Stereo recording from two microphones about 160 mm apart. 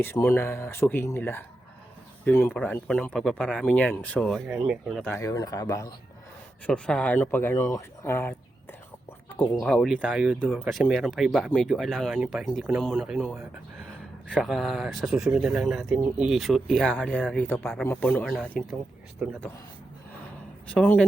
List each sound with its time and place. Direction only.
0.0 s speech: 15° left (ahead or behind)
4.4 s speech: 5° right (ahead or behind)
5.1 s speech: 20° left (ahead or behind)
6.7 s speech: 5° left (ahead or behind)
9.4 s speech: 5° left (ahead or behind)
19.2 s a man's voice: 5° right (ahead or behind)
20.7 s speech: 10° left (ahead or behind)